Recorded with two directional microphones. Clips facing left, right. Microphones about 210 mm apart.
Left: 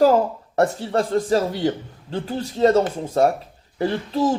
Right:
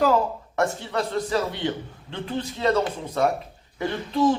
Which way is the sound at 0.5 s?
35° left (ahead or behind).